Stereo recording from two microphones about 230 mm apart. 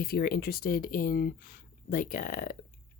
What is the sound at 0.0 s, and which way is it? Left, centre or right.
Speech, left.